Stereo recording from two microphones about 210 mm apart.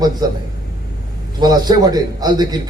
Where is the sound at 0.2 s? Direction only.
20° right (ahead or behind).